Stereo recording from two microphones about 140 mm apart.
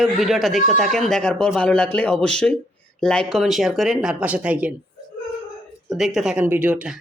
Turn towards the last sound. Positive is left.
turn(degrees=-10)  # may be behind; listen again after turning